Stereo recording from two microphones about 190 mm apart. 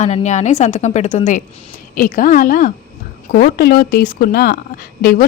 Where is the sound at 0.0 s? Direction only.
35° left (ahead or behind).